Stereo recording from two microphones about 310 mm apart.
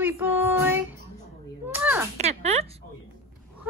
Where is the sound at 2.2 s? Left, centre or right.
Centre.